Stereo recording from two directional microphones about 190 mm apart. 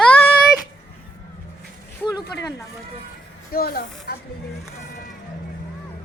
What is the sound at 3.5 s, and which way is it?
Speech, 55° left (ahead or behind).